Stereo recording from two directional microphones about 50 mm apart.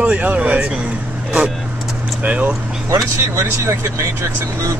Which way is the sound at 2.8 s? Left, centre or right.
Right.